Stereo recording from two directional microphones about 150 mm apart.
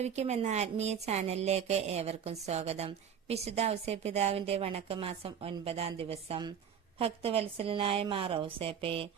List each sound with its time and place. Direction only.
0.0 s a woman's voice: 45° right (ahead or behind)